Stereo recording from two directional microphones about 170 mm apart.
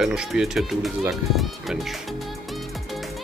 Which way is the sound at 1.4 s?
Centre (ahead or behind).